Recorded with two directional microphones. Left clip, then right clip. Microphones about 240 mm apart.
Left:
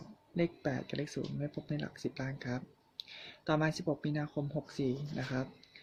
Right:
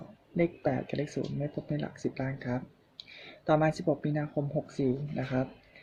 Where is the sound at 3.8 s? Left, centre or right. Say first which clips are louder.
Right 6 dB; centre.